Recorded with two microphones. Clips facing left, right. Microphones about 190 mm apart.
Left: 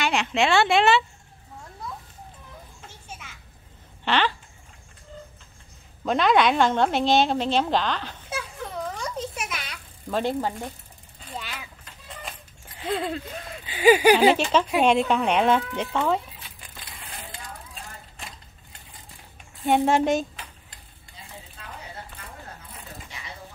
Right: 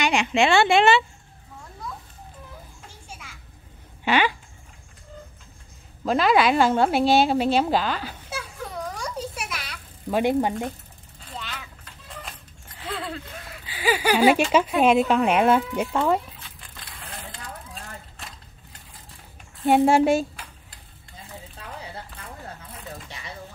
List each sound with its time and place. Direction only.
0.0 s speech: centre (ahead or behind)
4.0 s speech: 10° right (ahead or behind)
6.0 s speech: 5° right (ahead or behind)
9.3 s a sound: 5° right (ahead or behind)
11.3 s a sound: 5° left (ahead or behind)
12.1 s vehicle: 5° left (ahead or behind)
12.9 s speech: 15° left (ahead or behind)
13.3 s a sound: 25° left (ahead or behind)
14.1 s speech: 10° right (ahead or behind)
16.3 s vehicle: 5° left (ahead or behind)
19.6 s speech: 5° right (ahead or behind)